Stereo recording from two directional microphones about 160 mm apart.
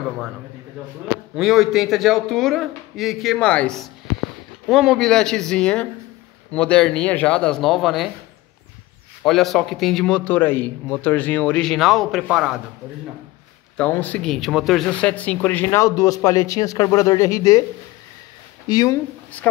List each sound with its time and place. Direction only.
1.3 s a man's voice: centre (ahead or behind)
9.2 s a man's voice: centre (ahead or behind)
13.7 s speech: 10° left (ahead or behind)
18.7 s speech: 25° left (ahead or behind)